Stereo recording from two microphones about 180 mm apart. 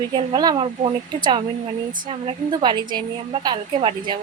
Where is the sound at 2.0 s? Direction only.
30° right (ahead or behind).